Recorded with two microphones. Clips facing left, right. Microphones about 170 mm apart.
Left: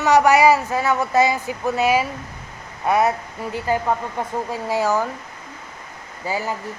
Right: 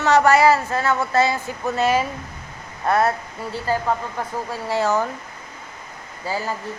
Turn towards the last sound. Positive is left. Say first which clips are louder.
# left 1 dB
turn(degrees=15)  # may be behind; listen again after turning